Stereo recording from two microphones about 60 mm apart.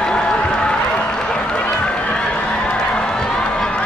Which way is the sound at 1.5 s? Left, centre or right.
Centre.